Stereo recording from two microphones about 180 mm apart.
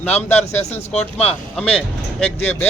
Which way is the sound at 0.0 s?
10° left (ahead or behind).